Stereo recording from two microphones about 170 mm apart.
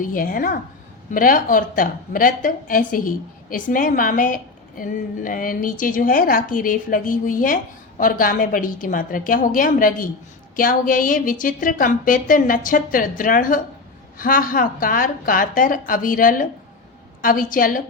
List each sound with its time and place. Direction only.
0.0 s a woman's voice: 55° left (ahead or behind)